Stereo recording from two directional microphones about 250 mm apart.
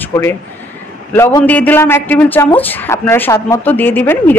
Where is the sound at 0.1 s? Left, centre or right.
Centre.